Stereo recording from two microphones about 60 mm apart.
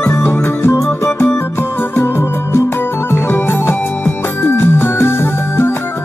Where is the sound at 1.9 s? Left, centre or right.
Left.